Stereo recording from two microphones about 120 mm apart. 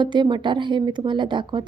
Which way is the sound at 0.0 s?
40° right (ahead or behind).